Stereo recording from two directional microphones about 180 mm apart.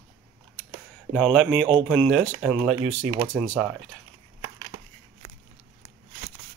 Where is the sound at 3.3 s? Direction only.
Centre (ahead or behind).